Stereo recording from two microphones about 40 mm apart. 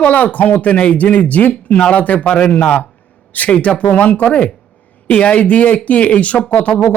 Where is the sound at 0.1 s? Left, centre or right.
Left.